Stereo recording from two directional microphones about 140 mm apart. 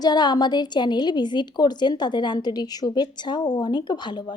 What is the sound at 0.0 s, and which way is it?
A woman's voice, 30° left (ahead or behind).